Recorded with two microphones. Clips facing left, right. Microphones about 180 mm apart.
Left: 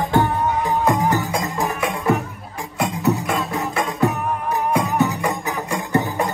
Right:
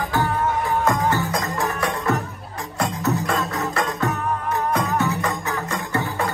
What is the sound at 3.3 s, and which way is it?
Music, 10° left (ahead or behind).